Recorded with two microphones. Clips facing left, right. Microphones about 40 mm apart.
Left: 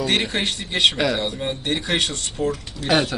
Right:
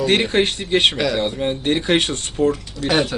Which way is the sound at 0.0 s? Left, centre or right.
Right.